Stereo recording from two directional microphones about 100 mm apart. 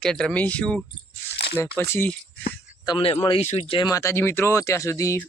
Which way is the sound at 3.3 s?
70° left (ahead or behind).